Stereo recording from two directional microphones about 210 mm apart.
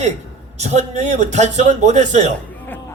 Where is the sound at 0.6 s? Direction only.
30° right (ahead or behind).